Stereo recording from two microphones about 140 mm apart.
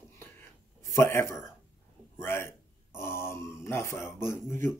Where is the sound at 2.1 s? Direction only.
15° left (ahead or behind).